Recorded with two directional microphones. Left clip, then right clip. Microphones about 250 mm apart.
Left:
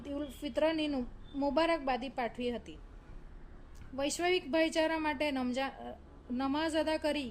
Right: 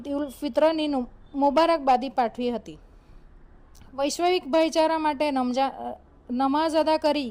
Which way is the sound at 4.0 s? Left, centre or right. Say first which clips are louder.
Right 8 dB; right.